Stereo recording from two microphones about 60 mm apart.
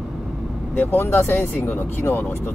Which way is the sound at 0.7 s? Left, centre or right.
Left.